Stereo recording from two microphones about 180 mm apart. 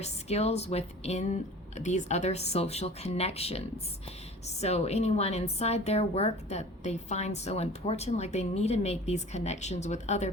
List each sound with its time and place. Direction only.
0.0 s a woman's voice: 35° left (ahead or behind)